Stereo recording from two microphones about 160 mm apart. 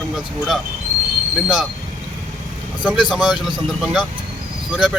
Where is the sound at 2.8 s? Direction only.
5° right (ahead or behind).